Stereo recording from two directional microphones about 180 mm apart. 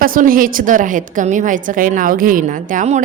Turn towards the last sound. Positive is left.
turn(degrees=-45)  # may be behind; listen again after turning